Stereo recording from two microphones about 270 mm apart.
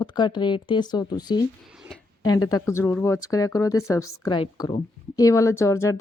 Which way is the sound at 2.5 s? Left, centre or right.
Centre.